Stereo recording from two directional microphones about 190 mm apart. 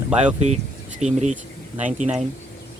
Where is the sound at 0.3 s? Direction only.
35° right (ahead or behind).